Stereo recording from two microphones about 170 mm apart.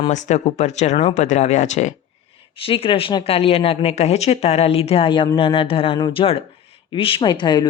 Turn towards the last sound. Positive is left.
turn(degrees=25)  # may be behind; listen again after turning